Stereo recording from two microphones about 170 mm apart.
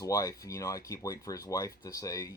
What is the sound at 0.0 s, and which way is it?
Speech, 20° left (ahead or behind).